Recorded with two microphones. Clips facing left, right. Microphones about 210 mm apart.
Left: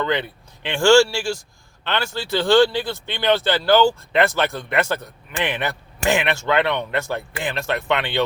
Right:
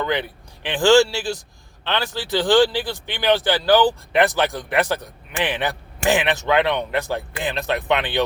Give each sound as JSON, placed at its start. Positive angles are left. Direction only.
{"t": 0.0, "sound": "speech", "side_deg": -15}